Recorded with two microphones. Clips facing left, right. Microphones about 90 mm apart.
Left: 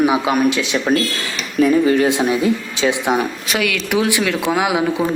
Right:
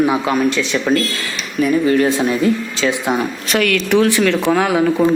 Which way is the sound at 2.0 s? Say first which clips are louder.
Right 1 dB; 20° left (ahead or behind).